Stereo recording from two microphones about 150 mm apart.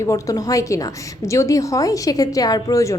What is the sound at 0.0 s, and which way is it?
A woman's voice, 20° left (ahead or behind).